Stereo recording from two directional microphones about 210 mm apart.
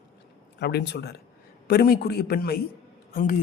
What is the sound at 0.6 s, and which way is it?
A man's voice, 50° left (ahead or behind).